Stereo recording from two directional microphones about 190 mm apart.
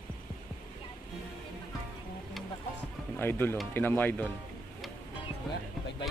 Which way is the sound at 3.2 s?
10° left (ahead or behind).